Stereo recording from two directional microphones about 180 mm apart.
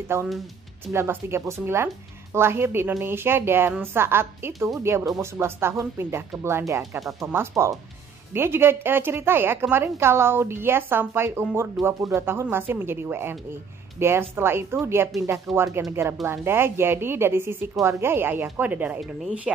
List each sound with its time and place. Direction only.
0.1 s a woman's voice: 15° right (ahead or behind)